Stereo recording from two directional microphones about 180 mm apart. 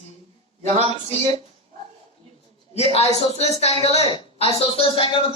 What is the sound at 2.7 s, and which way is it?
A man's voice, 35° left (ahead or behind).